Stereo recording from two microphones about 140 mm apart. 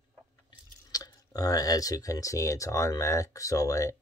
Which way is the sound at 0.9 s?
25° left (ahead or behind).